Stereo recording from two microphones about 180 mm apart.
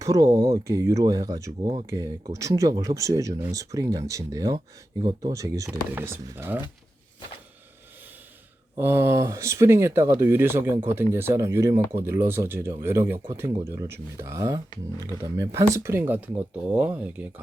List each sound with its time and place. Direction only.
0.0 s speech: 20° right (ahead or behind)
8.7 s speech: 15° right (ahead or behind)